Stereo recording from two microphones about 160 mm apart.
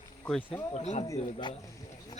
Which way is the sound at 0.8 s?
45° left (ahead or behind).